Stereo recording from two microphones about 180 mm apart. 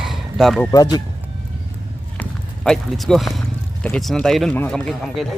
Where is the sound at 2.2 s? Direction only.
Centre (ahead or behind).